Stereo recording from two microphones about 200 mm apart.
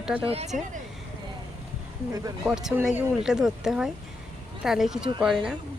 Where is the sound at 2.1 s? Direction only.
20° right (ahead or behind).